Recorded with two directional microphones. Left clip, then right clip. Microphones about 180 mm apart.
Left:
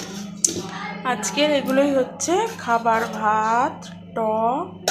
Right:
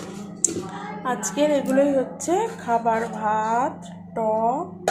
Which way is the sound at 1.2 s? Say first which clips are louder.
Left 1 dB; 15° right (ahead or behind).